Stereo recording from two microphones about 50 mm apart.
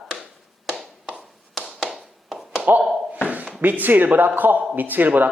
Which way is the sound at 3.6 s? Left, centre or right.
Right.